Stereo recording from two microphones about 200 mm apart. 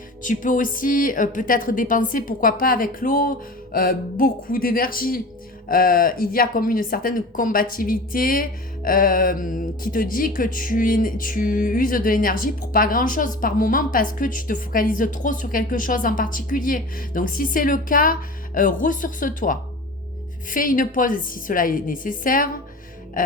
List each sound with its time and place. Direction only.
0.2 s speech: 40° left (ahead or behind)
23.2 s music: 45° left (ahead or behind)